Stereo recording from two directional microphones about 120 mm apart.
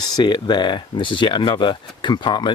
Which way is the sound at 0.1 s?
40° left (ahead or behind).